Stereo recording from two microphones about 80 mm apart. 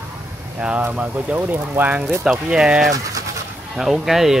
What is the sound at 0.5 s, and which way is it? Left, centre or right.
Speech, centre.